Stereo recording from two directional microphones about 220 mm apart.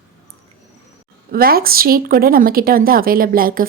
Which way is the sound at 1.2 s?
45° right (ahead or behind).